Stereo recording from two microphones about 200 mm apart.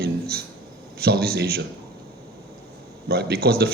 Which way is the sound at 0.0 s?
50° right (ahead or behind).